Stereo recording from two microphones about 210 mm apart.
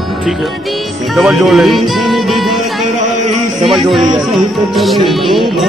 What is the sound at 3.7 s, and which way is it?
Music, centre (ahead or behind).